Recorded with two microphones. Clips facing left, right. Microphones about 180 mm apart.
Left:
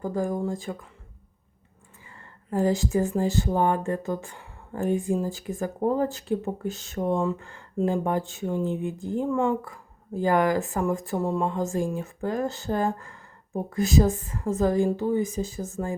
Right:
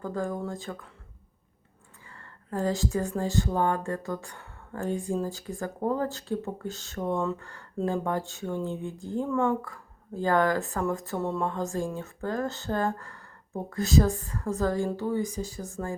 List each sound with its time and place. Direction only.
0.0 s speech: 15° left (ahead or behind)
2.0 s speech: 15° left (ahead or behind)